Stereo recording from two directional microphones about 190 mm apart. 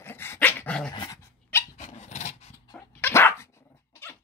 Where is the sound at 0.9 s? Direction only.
25° left (ahead or behind).